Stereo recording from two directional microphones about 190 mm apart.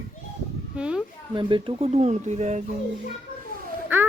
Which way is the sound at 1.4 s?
25° right (ahead or behind).